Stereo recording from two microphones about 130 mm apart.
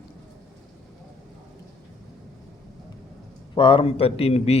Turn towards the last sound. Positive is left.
turn(degrees=55)  # may be behind; listen again after turning